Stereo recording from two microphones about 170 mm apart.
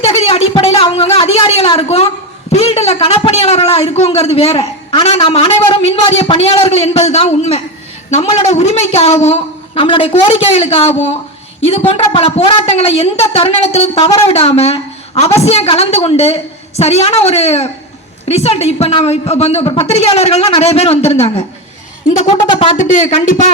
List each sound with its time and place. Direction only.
0.0 s a woman's voice: 35° left (ahead or behind)
22.9 s speech: 45° left (ahead or behind)